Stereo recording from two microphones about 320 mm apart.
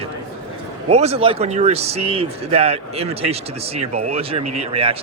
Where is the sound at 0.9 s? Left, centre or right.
Centre.